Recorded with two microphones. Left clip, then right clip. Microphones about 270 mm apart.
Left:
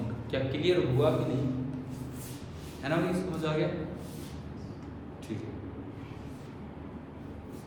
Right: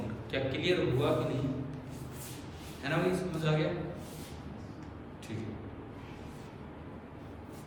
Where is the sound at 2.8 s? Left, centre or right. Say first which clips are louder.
Left 1 dB; left.